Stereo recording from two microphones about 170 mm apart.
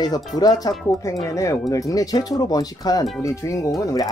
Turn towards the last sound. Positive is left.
turn(degrees=20)  # may be behind; listen again after turning